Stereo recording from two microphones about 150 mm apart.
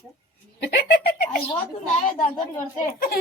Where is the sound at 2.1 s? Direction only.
55° left (ahead or behind).